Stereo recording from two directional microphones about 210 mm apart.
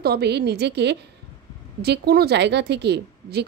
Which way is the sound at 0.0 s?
50° right (ahead or behind).